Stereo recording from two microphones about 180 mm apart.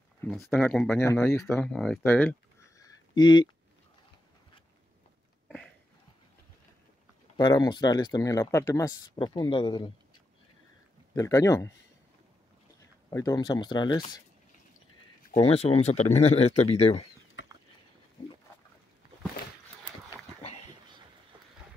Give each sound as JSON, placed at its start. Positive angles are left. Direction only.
{"t": 0.2, "sound": "speech", "side_deg": 5}
{"t": 2.8, "sound": "a sound", "side_deg": 25}
{"t": 7.3, "sound": "speech", "side_deg": 20}
{"t": 9.3, "sound": "speech", "side_deg": 30}
{"t": 11.1, "sound": "speech", "side_deg": 15}
{"t": 13.1, "sound": "speech", "side_deg": 20}
{"t": 15.3, "sound": "speech", "side_deg": 35}